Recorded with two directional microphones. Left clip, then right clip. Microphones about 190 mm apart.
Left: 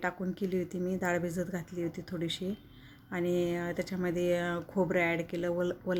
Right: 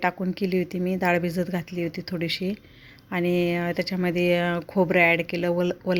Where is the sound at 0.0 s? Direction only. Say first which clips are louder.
Right 9 dB; 25° right (ahead or behind).